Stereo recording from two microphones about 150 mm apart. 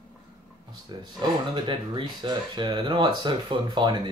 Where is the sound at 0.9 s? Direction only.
30° right (ahead or behind).